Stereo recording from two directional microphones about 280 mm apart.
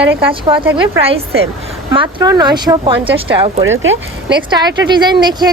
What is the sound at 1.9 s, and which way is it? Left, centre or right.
Speech, centre.